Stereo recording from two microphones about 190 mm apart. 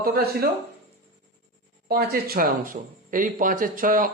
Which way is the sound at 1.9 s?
50° right (ahead or behind).